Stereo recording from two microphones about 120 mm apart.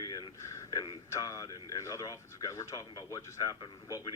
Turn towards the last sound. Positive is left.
turn(degrees=30)  # may be behind; listen again after turning